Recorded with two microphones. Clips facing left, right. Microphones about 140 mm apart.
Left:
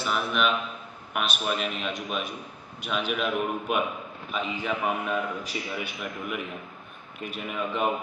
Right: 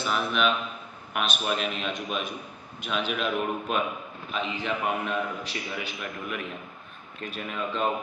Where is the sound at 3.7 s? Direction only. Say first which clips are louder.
Left 1 dB; 15° left (ahead or behind).